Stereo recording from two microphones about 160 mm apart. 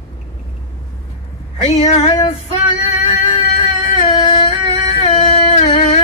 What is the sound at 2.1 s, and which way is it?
Music, 30° left (ahead or behind).